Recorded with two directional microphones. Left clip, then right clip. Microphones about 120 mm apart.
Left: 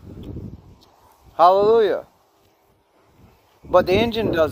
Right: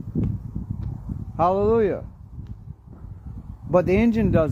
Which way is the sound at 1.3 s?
35° left (ahead or behind).